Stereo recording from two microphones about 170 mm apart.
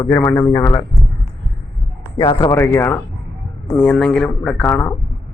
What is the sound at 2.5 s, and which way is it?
Speech, 15° left (ahead or behind).